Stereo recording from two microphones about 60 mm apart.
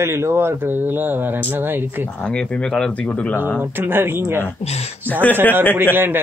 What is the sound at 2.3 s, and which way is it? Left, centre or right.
Speech, centre.